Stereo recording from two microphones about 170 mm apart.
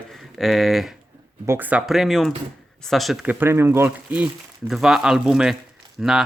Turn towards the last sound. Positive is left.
turn(degrees=-5)  # may be behind; listen again after turning